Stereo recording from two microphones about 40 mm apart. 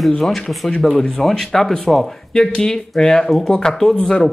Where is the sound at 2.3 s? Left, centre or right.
Centre.